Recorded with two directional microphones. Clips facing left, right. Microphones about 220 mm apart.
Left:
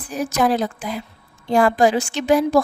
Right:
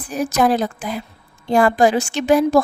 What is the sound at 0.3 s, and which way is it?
A woman's voice, 50° right (ahead or behind).